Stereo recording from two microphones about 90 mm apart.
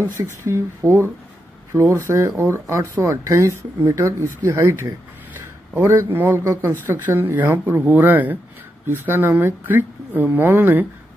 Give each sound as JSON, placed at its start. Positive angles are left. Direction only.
{"t": 0.2, "sound": "speech", "side_deg": -35}